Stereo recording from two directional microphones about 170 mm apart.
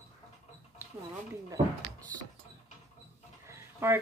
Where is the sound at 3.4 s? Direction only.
15° right (ahead or behind).